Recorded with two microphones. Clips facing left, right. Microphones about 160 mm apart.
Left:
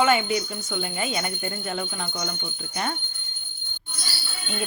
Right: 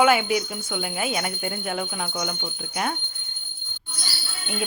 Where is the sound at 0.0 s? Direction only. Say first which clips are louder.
Right 2 dB; 10° right (ahead or behind).